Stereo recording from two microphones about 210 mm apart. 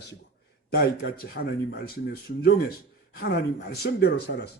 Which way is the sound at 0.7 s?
50° left (ahead or behind).